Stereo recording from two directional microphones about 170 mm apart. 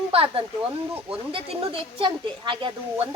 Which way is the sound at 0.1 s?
30° right (ahead or behind).